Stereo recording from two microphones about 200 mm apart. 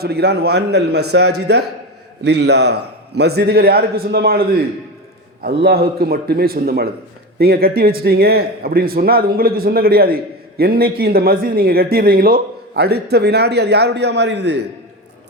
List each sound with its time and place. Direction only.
0.0 s a man's voice: 55° right (ahead or behind)
1.0 s a man's voice: 75° right (ahead or behind); by 14.6 s 60° right (ahead or behind)